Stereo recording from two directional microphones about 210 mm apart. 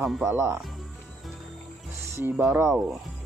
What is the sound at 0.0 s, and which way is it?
Speech, centre (ahead or behind).